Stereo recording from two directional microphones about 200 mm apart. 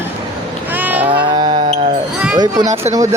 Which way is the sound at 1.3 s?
25° right (ahead or behind).